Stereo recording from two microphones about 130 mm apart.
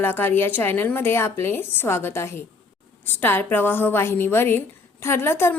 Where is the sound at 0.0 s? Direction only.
15° left (ahead or behind).